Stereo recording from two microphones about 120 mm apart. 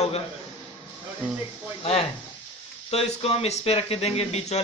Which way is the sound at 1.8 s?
50° left (ahead or behind).